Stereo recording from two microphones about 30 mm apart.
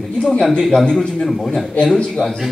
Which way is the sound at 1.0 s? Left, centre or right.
Left.